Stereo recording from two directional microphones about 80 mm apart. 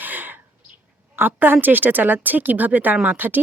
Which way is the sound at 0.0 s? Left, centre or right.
Right.